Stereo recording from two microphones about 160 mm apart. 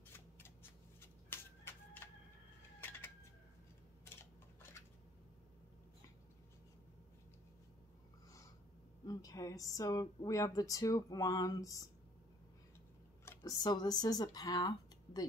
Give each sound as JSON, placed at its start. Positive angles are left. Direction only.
{"t": 1.3, "sound": "a sound", "side_deg": 15}
{"t": 9.0, "sound": "speech", "side_deg": 25}
{"t": 13.4, "sound": "speech", "side_deg": 25}